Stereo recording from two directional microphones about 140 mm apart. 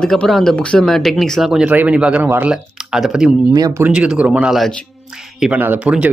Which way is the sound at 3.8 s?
10° right (ahead or behind).